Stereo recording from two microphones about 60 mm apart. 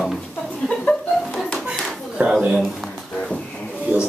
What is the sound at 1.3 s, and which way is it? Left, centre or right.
Clapping, centre.